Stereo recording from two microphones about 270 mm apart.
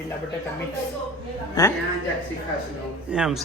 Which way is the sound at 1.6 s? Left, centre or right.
Centre.